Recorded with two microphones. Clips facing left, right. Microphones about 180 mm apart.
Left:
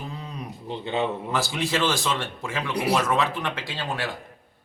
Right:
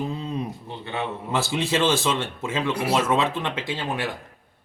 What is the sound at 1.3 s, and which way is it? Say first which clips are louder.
Speech: right 2 dB; 25° right (ahead or behind).